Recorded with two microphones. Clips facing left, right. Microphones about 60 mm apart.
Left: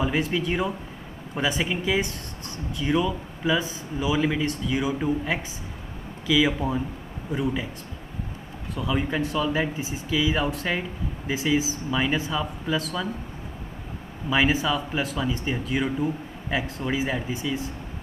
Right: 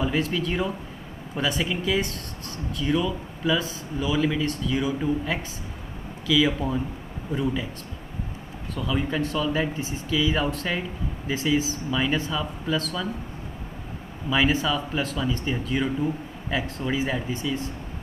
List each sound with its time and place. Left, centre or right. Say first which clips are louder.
0.0 s speech: even; centre
8.7 s speech: even; centre
14.3 s speech: even; centre